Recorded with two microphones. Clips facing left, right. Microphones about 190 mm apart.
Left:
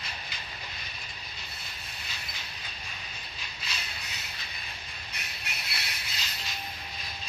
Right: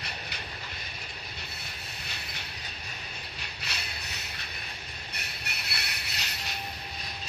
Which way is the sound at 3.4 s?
65° right (ahead or behind).